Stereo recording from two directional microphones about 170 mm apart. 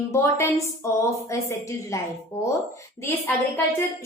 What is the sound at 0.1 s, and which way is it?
Speech, 15° left (ahead or behind).